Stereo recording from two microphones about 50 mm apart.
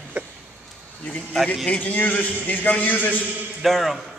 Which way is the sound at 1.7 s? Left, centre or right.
Left.